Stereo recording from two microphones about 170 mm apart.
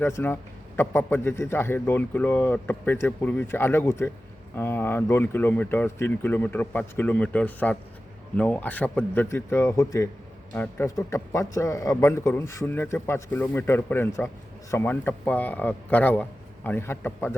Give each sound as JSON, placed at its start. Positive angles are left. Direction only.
{"t": 0.0, "sound": "a man's voice", "side_deg": 15}